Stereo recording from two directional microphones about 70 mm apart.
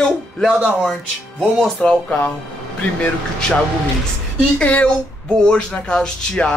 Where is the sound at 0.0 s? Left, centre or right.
Centre.